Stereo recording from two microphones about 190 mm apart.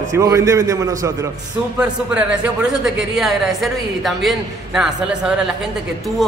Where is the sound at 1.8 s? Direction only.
5° right (ahead or behind).